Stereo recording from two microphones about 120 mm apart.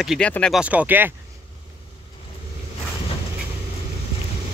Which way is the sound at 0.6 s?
10° right (ahead or behind).